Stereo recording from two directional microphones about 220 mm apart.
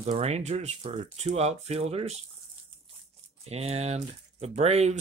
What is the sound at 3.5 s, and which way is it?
Speech, 30° right (ahead or behind).